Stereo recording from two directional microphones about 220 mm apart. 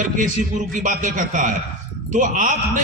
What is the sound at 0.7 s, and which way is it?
A man's voice, 35° right (ahead or behind).